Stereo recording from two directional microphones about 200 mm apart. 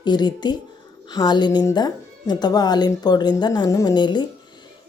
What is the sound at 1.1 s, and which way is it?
Speech, 20° left (ahead or behind).